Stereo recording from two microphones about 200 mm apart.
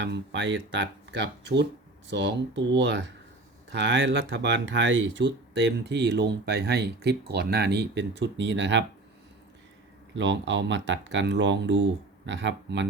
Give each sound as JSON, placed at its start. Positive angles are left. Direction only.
{"t": 0.0, "sound": "speech", "side_deg": -60}
{"t": 10.2, "sound": "speech", "side_deg": -65}